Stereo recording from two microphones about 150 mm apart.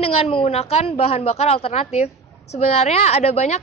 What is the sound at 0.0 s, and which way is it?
A woman's voice, 40° left (ahead or behind).